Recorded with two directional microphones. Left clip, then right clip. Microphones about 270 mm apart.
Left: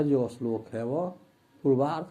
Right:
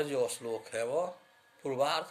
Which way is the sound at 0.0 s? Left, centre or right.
Centre.